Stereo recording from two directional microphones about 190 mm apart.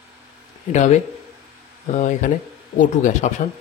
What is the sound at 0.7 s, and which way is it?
Speech, 35° left (ahead or behind).